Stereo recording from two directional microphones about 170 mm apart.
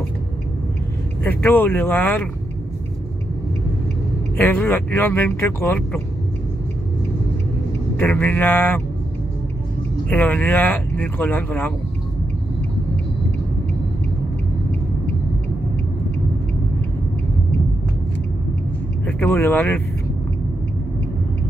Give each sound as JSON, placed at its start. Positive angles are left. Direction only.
{"t": 1.2, "sound": "speech", "side_deg": 10}
{"t": 4.4, "sound": "speech", "side_deg": 10}
{"t": 8.0, "sound": "speech", "side_deg": 10}
{"t": 10.0, "sound": "speech", "side_deg": 10}
{"t": 19.0, "sound": "speech", "side_deg": 10}